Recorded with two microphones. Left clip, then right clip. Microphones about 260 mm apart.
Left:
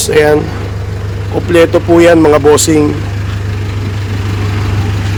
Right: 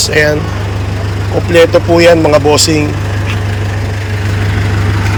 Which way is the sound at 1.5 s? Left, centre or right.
Centre.